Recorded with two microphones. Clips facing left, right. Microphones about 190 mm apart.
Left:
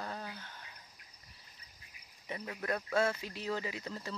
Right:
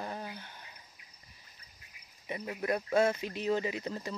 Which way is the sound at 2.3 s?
15° right (ahead or behind).